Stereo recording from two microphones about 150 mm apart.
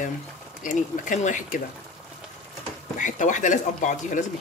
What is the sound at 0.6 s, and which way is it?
Speech, 60° left (ahead or behind).